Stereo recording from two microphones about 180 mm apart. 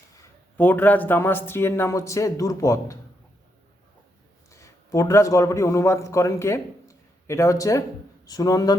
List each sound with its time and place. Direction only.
0.2 s speech: 10° left (ahead or behind)
4.5 s a man's voice: 15° left (ahead or behind)